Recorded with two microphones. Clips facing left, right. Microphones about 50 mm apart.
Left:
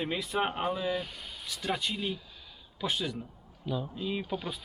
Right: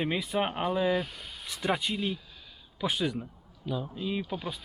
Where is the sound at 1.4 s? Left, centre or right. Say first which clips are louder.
Right 4 dB; right.